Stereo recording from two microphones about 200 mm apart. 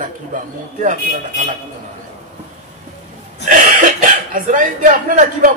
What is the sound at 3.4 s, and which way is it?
Speech, 40° right (ahead or behind).